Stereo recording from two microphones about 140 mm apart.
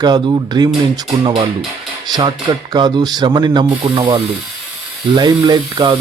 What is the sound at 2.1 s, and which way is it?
Speech, 30° right (ahead or behind).